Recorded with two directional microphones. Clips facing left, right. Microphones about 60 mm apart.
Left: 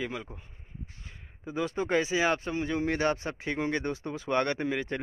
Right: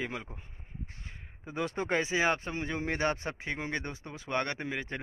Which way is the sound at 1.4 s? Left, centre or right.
Right.